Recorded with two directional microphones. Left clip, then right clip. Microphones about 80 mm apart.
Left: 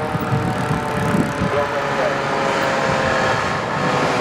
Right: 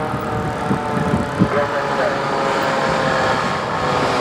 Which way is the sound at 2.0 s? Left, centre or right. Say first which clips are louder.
Right 1 dB; centre.